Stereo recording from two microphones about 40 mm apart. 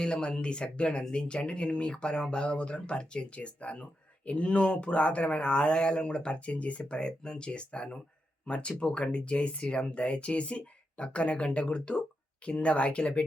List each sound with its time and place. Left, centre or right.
0.0 s speech: left